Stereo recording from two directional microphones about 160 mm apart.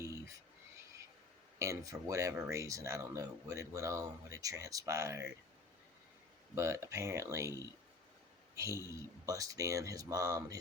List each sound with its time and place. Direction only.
0.0 s frog: 20° right (ahead or behind)
1.5 s speech: 20° right (ahead or behind)
6.6 s a man's voice: 20° right (ahead or behind)